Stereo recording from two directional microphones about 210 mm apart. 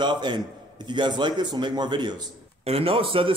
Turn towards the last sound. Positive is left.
turn(degrees=-25)  # may be behind; listen again after turning